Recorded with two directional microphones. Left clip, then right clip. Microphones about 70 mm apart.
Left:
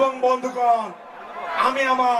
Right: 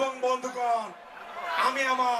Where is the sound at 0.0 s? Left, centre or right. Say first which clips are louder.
Left 8 dB; right.